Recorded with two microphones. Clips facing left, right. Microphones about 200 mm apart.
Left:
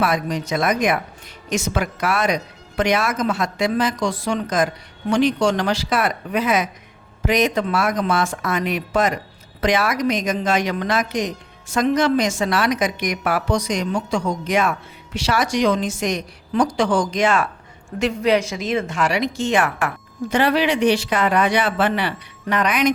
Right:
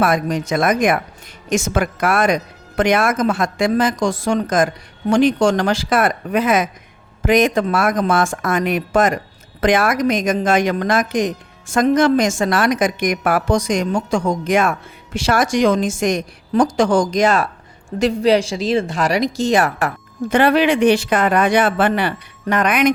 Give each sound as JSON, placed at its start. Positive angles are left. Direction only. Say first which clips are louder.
{"t": 0.0, "sound": "a woman's voice", "louder": "right 4 dB", "side_deg": -50}
{"t": 20.3, "sound": "a woman's voice", "louder": "right 4 dB", "side_deg": -55}